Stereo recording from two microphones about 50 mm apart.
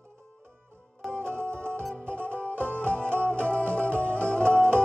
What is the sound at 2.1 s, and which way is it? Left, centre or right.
Music, left.